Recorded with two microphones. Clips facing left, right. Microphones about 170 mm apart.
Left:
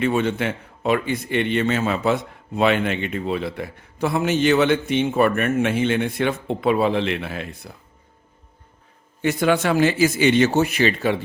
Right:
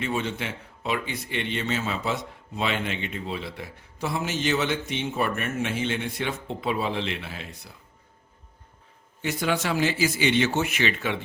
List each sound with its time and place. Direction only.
0.0 s a man's voice: 60° left (ahead or behind)
9.2 s speech: 55° left (ahead or behind); by 11.2 s 40° left (ahead or behind)